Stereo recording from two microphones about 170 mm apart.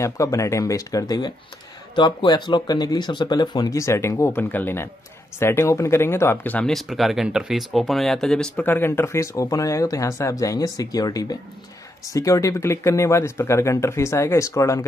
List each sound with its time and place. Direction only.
0.0 s speech: 20° left (ahead or behind)